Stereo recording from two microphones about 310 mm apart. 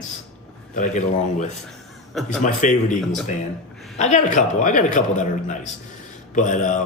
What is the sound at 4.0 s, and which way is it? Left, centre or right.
A man's voice, left.